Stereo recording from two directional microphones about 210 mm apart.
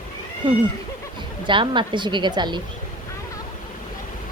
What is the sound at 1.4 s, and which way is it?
A woman's voice, 25° right (ahead or behind).